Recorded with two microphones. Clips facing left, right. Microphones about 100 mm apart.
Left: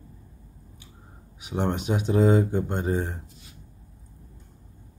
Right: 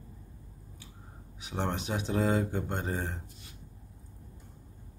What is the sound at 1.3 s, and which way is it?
Speech, 15° left (ahead or behind).